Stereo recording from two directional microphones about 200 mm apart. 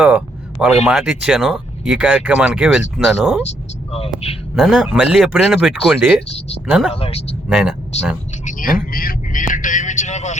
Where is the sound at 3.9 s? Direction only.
30° left (ahead or behind).